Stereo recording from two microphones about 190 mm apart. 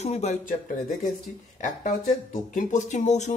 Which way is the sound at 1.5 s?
40° left (ahead or behind).